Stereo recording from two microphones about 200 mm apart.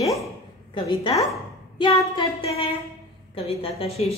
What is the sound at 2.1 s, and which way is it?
A woman's voice, 30° left (ahead or behind).